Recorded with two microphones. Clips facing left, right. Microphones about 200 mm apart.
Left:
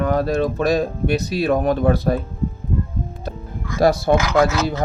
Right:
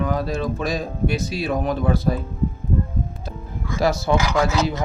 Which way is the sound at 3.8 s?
55° left (ahead or behind).